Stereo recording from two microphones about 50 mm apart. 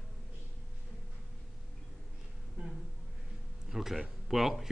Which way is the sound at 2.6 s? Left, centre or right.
Right.